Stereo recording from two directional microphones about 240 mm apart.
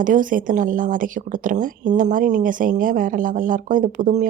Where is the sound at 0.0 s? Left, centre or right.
Right.